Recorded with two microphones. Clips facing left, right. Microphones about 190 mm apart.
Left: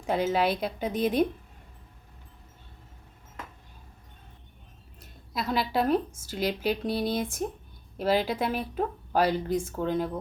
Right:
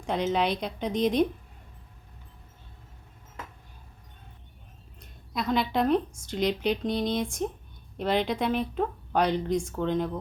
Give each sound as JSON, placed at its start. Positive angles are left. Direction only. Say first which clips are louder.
{"t": 0.0, "sound": "a woman's voice", "louder": "left 1 dB", "side_deg": 5}
{"t": 4.9, "sound": "a woman's voice", "louder": "right 1 dB", "side_deg": 5}